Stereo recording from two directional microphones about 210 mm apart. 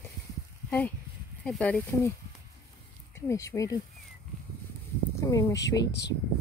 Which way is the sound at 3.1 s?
15° left (ahead or behind).